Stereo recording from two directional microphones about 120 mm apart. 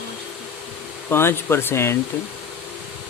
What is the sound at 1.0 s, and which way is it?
Speech, 20° left (ahead or behind).